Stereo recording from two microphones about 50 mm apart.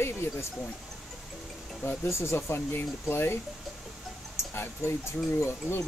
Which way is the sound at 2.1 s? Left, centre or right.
Left.